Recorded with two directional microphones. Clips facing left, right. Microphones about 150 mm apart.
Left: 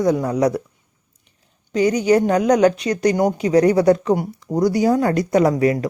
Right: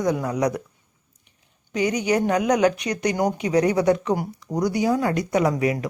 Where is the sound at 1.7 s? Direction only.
30° left (ahead or behind).